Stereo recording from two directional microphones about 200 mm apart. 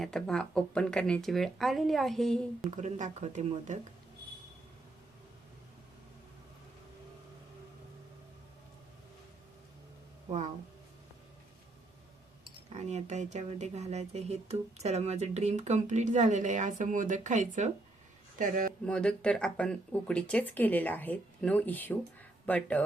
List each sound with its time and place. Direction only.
0.0 s speech: 5° left (ahead or behind)
2.6 s speech: 35° right (ahead or behind)
12.5 s speech: 35° right (ahead or behind)
18.9 s speech: 5° left (ahead or behind)